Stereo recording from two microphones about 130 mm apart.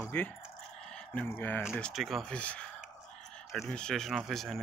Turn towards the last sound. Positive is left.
turn(degrees=0)  # may be behind; listen again after turning